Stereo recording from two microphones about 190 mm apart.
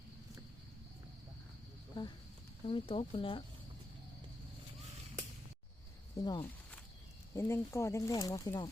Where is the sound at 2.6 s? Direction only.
30° left (ahead or behind).